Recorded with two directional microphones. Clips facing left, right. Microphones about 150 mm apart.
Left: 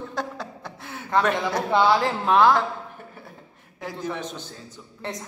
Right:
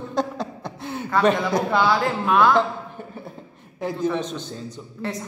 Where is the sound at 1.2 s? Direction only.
20° right (ahead or behind).